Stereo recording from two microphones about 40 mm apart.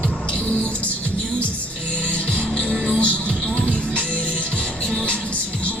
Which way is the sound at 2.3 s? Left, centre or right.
Left.